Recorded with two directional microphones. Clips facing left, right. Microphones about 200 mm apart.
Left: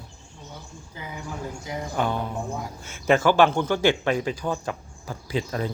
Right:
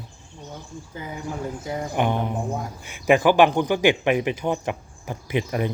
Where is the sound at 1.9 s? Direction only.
20° right (ahead or behind).